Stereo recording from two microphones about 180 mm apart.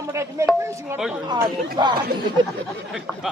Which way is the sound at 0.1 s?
15° right (ahead or behind).